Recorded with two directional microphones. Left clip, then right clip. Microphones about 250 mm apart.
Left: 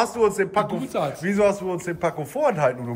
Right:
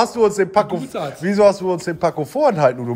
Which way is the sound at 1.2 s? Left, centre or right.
Centre.